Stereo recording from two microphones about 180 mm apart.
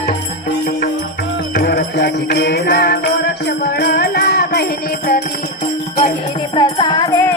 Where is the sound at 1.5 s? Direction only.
65° left (ahead or behind).